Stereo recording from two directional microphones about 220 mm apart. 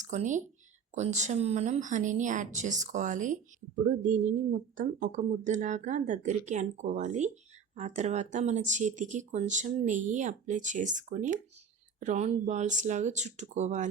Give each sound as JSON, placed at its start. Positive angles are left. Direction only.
{"t": 0.0, "sound": "speech", "side_deg": -35}